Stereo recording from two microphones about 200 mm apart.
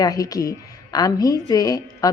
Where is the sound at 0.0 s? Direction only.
20° left (ahead or behind).